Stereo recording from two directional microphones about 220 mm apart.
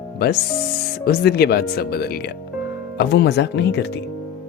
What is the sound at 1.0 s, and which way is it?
Speech, 45° left (ahead or behind).